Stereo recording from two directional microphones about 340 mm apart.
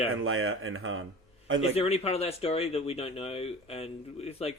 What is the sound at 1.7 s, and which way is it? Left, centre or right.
Speech, centre.